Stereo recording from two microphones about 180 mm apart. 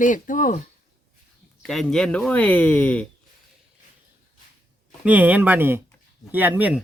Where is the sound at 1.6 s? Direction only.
5° left (ahead or behind).